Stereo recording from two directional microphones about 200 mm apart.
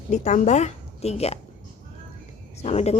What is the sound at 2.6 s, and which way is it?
Speech, 35° left (ahead or behind).